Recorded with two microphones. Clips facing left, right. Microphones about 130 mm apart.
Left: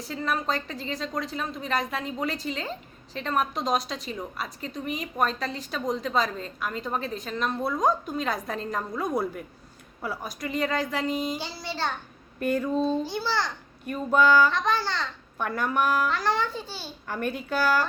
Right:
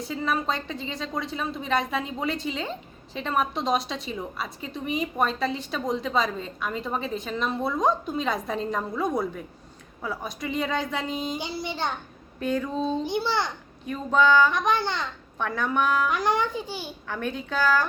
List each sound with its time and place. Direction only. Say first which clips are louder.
0.0 s a woman's voice: right 2 dB; centre (ahead or behind)
11.3 s a child's voice: right 2 dB; 20° right (ahead or behind)
12.4 s a woman's voice: left 2 dB; 5° left (ahead or behind)
12.9 s a child's voice: right 1 dB; 20° right (ahead or behind)
13.9 s a woman's voice: even; 10° left (ahead or behind)
14.5 s a child's voice: right 2 dB; 20° right (ahead or behind)
15.4 s a woman's voice: even; 5° left (ahead or behind)
16.0 s a child's voice: right 2 dB; 15° right (ahead or behind)
17.1 s a woman's voice: left 2 dB; 10° left (ahead or behind)